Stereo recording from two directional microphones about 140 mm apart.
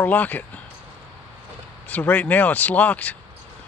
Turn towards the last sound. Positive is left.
turn(degrees=10)  # may be behind; listen again after turning